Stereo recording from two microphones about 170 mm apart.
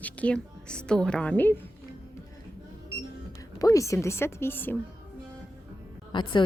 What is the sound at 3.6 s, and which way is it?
Speech, 20° left (ahead or behind).